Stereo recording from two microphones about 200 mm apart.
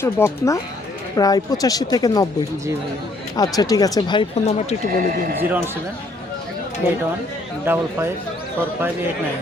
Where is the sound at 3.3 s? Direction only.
20° left (ahead or behind).